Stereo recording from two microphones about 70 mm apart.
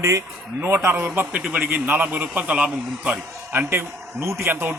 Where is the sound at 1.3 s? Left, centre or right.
Right.